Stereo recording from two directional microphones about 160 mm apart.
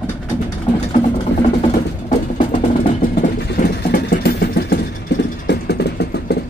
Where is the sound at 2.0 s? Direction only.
50° left (ahead or behind).